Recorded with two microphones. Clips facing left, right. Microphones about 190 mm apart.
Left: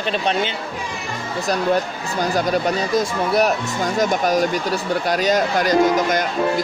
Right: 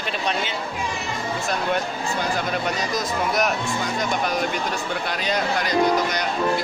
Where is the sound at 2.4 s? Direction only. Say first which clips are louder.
Left 6 dB; 35° left (ahead or behind).